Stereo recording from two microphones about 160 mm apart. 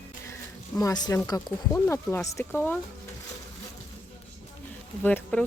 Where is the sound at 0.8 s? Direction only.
25° left (ahead or behind).